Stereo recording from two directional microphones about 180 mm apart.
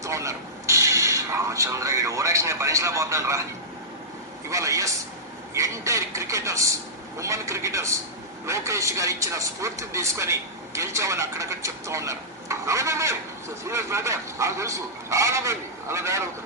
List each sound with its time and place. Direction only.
0.0 s speech: 15° right (ahead or behind)
4.4 s a man's voice: 15° right (ahead or behind)